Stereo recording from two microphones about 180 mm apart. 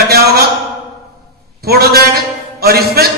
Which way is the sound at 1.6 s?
60° right (ahead or behind).